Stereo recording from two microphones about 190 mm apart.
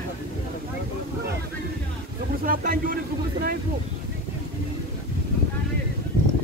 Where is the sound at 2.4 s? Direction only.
50° right (ahead or behind).